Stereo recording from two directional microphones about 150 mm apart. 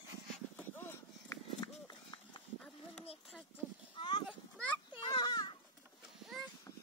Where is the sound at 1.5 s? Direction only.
30° left (ahead or behind).